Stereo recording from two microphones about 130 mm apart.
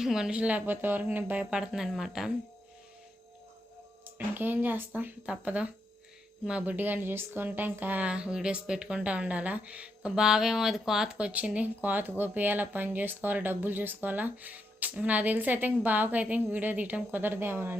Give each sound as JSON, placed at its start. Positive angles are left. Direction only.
{"t": 0.0, "sound": "speech", "side_deg": -5}
{"t": 4.0, "sound": "speech", "side_deg": -15}